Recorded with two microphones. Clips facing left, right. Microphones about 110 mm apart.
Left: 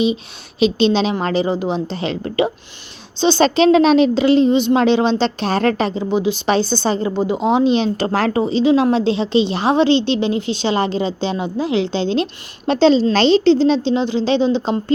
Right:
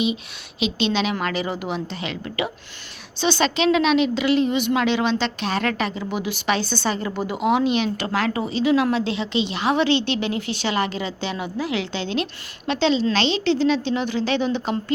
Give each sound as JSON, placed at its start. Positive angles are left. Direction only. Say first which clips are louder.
{"t": 0.6, "sound": "a woman's voice", "louder": "left 7 dB", "side_deg": 35}